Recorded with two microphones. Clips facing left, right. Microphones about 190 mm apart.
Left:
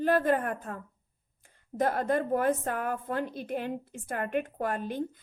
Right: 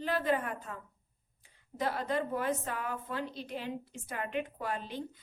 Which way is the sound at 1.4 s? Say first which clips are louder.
Left 6 dB; 50° left (ahead or behind).